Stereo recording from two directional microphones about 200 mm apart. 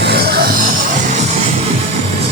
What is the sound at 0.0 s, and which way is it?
Music, 55° right (ahead or behind).